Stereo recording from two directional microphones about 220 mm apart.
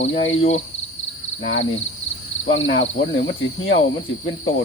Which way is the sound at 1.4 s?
60° left (ahead or behind).